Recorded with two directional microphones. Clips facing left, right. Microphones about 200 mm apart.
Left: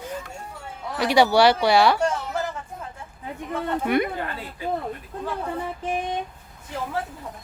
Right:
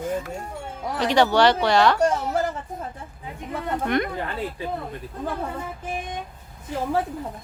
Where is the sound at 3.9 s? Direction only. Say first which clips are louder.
Left 2 dB; 10° left (ahead or behind).